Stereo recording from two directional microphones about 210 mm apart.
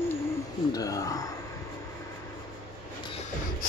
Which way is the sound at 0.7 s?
15° left (ahead or behind).